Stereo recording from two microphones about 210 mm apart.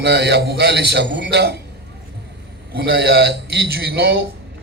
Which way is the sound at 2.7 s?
50° right (ahead or behind).